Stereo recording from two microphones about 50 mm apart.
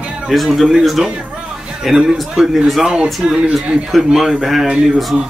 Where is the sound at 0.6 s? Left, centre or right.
Centre.